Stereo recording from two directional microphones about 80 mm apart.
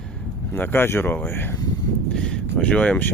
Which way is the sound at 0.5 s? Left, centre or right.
Left.